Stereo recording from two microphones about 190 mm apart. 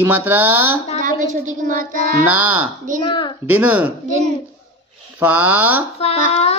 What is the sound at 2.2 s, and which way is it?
Speech, 5° right (ahead or behind).